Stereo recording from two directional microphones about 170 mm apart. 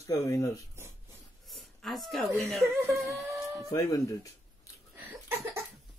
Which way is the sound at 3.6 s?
20° left (ahead or behind).